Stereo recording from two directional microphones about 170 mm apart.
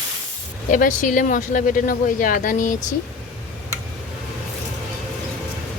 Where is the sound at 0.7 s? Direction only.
50° left (ahead or behind).